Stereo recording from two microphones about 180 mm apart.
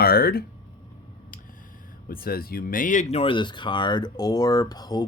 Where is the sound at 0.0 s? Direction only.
55° left (ahead or behind).